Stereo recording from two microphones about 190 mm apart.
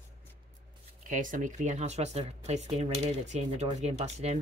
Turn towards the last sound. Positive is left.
turn(degrees=-35)  # may be behind; listen again after turning